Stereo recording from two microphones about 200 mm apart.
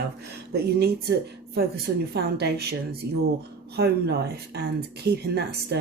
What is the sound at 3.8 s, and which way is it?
Speech, 55° right (ahead or behind).